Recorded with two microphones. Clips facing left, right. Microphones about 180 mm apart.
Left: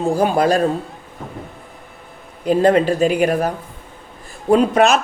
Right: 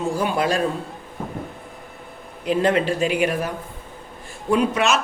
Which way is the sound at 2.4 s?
40° left (ahead or behind).